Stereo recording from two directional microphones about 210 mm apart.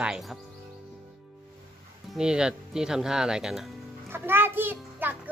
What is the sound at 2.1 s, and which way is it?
A child's voice, 5° right (ahead or behind).